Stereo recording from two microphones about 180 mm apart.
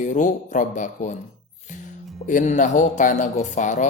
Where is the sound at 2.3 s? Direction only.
45° left (ahead or behind).